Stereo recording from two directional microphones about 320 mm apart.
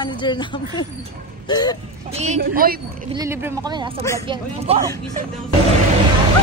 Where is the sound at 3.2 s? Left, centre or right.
Centre.